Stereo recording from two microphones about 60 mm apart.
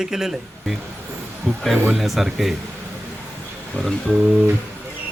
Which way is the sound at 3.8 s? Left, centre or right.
Left.